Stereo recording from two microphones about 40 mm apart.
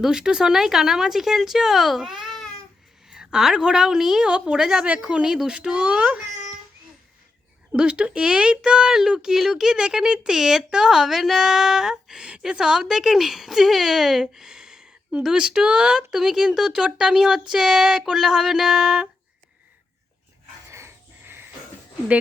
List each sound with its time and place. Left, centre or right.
0.0 s a woman's voice: centre
4.3 s speech: right
4.5 s speech: centre
5.7 s a child's voice: right
7.7 s speech: right
8.9 s speech: centre
18.0 s a sound: centre
18.3 s speech: centre
20.8 s a sound: right